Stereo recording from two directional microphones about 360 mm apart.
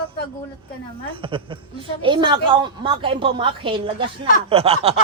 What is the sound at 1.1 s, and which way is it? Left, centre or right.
A man's voice, centre.